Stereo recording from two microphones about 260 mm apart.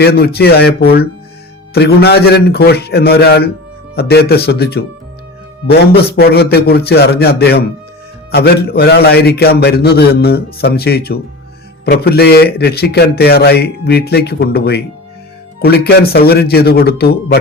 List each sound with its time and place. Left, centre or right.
0.0 s a man's voice: left